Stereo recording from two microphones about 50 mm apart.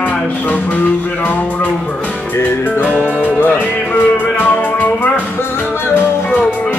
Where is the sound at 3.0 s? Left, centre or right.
Left.